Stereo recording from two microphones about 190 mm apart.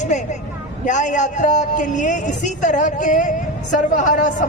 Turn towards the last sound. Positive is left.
turn(degrees=40)  # may be behind; listen again after turning